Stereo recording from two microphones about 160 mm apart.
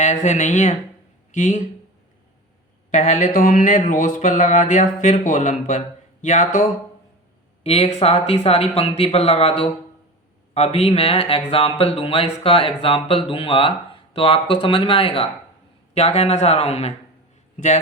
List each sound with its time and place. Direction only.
0.0 s speech: 50° left (ahead or behind)
2.9 s speech: 50° left (ahead or behind)
7.6 s speech: 40° left (ahead or behind)